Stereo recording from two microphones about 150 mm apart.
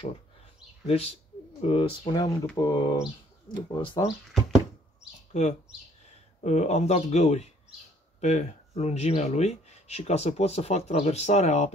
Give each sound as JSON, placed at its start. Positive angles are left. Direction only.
{"t": 0.8, "sound": "speech", "side_deg": 45}
{"t": 2.5, "sound": "speech", "side_deg": 25}
{"t": 5.3, "sound": "speech", "side_deg": 50}